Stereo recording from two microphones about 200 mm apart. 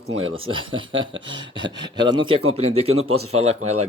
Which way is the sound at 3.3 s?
90° right.